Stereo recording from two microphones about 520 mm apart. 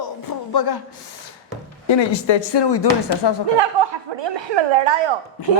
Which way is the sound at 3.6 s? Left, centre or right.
Right.